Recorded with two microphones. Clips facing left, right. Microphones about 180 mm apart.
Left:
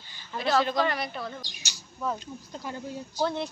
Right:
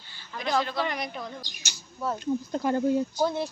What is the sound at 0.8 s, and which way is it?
Speech, 15° right (ahead or behind).